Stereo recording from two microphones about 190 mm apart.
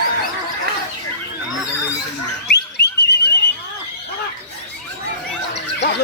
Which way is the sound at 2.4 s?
60° left (ahead or behind).